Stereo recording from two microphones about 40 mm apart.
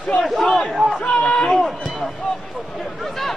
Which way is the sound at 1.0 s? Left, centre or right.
Left.